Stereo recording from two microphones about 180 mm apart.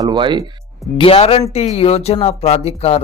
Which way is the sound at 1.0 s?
30° left (ahead or behind).